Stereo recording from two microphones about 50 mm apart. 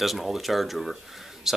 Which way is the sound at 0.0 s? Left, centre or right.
Centre.